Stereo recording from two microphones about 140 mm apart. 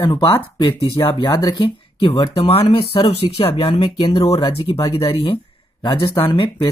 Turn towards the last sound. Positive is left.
turn(degrees=35)  # may be behind; listen again after turning